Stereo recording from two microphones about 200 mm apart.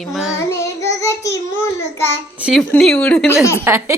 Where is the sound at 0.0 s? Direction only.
Centre (ahead or behind).